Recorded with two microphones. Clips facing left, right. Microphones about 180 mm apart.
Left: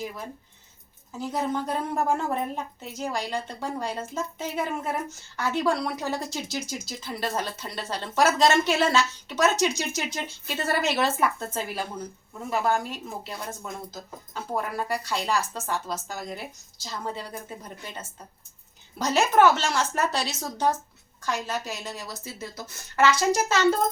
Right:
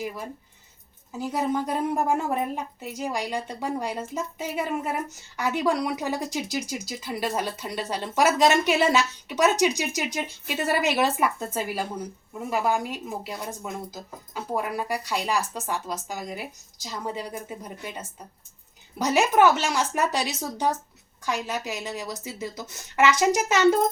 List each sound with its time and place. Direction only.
1.2 s speech: 10° right (ahead or behind)